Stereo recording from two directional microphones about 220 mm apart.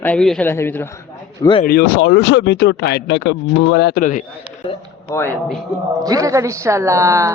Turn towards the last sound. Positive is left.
turn(degrees=-15)  # may be behind; listen again after turning